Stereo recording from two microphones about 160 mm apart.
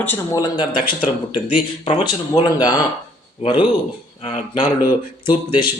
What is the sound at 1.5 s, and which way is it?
Speech, 35° left (ahead or behind).